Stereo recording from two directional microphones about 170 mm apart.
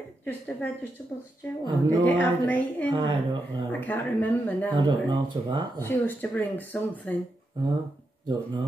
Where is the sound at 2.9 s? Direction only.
25° right (ahead or behind).